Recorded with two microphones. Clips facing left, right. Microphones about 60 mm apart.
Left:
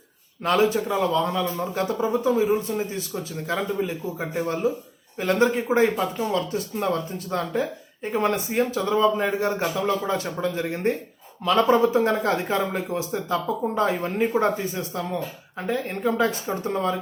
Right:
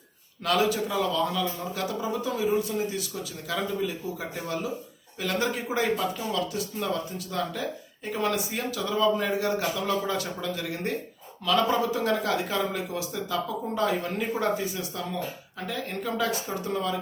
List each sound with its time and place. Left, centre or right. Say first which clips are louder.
0.4 s speech: left 4 dB; left